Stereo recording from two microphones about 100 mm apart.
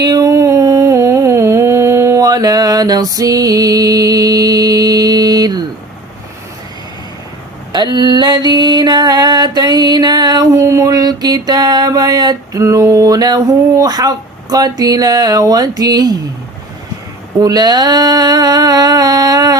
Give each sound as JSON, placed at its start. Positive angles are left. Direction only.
{"t": 0.0, "sound": "humming", "side_deg": -40}
{"t": 7.7, "sound": "music", "side_deg": -45}
{"t": 17.4, "sound": "a sound", "side_deg": -40}